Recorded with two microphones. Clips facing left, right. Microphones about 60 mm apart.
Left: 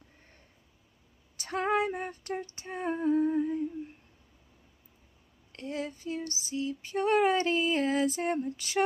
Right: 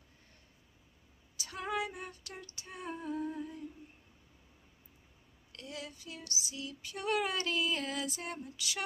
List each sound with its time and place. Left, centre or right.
1.3 s female singing: left
1.7 s humming: left
5.5 s female singing: left